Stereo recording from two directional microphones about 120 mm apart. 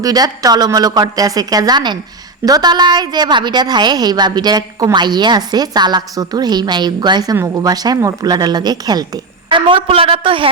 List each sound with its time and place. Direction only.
0.0 s a woman's voice: 30° right (ahead or behind); by 10.5 s 45° right (ahead or behind)